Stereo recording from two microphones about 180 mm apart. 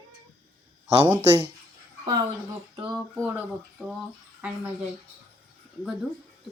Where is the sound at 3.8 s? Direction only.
5° left (ahead or behind).